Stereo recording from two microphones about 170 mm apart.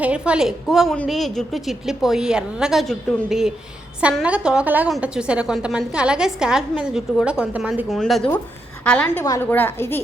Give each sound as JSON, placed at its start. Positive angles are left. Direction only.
{"t": 0.0, "sound": "a woman's voice", "side_deg": -5}